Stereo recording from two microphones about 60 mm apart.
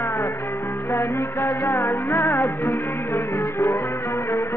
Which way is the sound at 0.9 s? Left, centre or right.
Left.